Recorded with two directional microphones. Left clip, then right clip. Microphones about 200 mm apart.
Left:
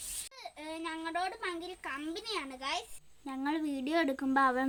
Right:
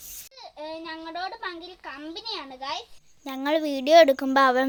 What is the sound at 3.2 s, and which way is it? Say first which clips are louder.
A woman's voice: right 10 dB; 50° right (ahead or behind).